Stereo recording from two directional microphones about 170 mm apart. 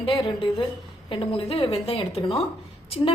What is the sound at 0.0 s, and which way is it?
A woman's voice, 30° left (ahead or behind).